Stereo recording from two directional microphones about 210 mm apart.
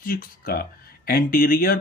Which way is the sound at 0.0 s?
40° left (ahead or behind).